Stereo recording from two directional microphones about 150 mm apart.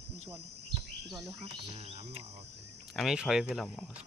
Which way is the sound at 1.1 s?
20° right (ahead or behind).